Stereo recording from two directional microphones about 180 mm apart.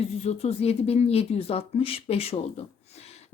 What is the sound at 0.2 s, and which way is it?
Speech, 35° left (ahead or behind).